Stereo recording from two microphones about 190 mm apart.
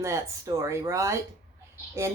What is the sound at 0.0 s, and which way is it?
Speech, 15° right (ahead or behind).